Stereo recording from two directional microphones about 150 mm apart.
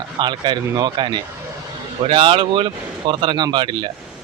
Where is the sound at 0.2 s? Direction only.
30° right (ahead or behind).